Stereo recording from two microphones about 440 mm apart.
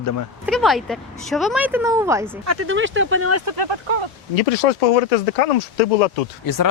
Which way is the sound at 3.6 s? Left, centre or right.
Right.